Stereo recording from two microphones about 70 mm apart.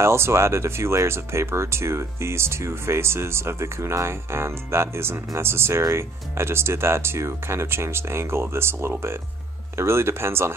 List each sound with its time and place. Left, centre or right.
0.0 s speech: right